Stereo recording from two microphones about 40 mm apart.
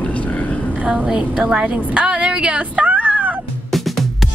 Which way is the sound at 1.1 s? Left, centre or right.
Right.